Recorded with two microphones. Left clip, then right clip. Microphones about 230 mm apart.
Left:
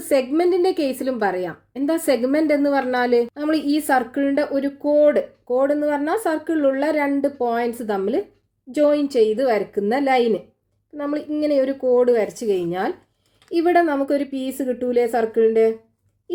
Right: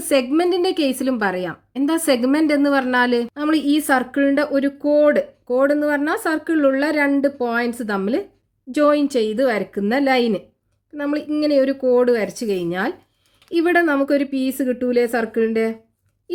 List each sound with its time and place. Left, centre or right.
0.1 s a woman's voice: right